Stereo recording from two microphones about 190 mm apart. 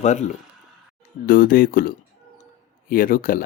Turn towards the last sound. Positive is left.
turn(degrees=45)  # may be behind; listen again after turning